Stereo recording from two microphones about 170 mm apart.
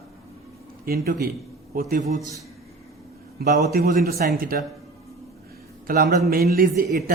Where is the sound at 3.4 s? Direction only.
70° right (ahead or behind).